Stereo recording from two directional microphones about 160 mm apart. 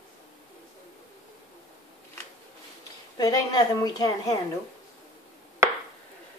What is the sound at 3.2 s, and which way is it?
Speech, 25° left (ahead or behind).